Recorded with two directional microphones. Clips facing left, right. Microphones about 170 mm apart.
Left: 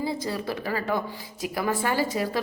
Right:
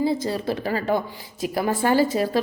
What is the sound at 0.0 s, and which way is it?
A woman's voice, 30° right (ahead or behind).